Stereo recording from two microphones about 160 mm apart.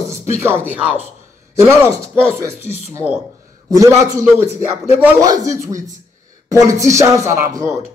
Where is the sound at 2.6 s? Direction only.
40° left (ahead or behind).